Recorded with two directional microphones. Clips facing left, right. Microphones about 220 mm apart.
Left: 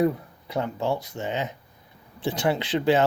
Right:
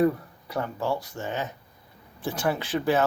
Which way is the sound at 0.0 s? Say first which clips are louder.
Even; 20° left (ahead or behind).